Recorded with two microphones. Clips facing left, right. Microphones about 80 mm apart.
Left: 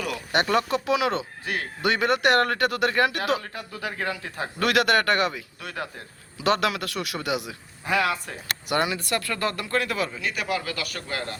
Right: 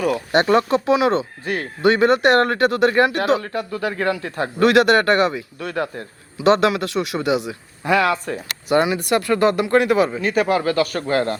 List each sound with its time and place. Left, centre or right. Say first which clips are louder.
0.4 s speech: right 7 dB; right
3.4 s speech: right 10 dB; right
4.6 s speech: right 7 dB; right
5.5 s speech: right 9 dB; right
6.3 s speech: right 8 dB; right
7.9 s speech: right 7 dB; right
8.7 s speech: right 8 dB; right
10.1 s speech: right 10 dB; right